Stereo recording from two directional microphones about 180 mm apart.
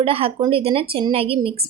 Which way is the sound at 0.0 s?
30° right (ahead or behind).